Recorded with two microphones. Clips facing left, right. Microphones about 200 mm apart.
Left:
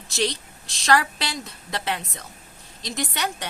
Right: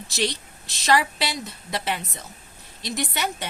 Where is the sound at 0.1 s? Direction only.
Centre (ahead or behind).